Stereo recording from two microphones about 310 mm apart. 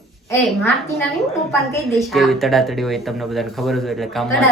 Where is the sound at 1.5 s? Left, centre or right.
Centre.